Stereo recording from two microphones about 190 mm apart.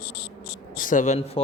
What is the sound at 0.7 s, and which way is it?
Speech, 45° left (ahead or behind).